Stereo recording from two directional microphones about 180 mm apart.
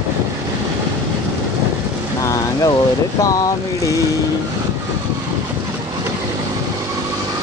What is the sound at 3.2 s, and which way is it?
Speech, 20° left (ahead or behind).